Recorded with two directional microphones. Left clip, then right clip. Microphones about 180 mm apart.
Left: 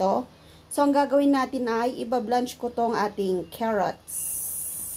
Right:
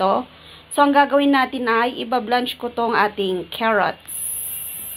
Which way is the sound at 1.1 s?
10° left (ahead or behind).